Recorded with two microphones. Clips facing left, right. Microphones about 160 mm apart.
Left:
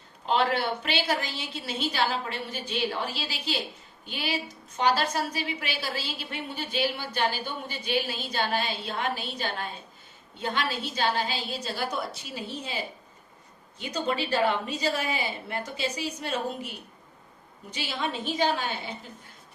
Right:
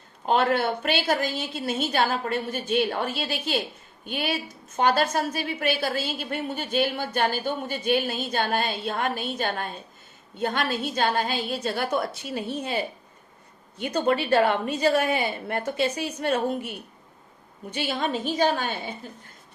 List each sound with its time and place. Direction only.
0.3 s a woman's voice: 50° right (ahead or behind)
17.7 s a woman's voice: 55° right (ahead or behind)